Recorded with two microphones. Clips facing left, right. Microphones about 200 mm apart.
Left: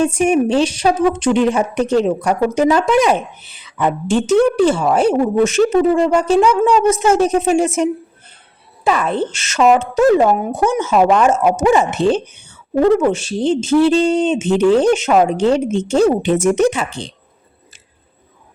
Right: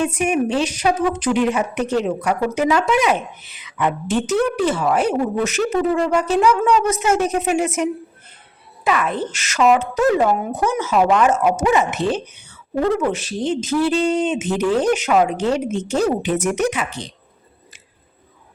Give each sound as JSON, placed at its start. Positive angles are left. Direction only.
{"t": 0.0, "sound": "a woman's voice", "side_deg": 30}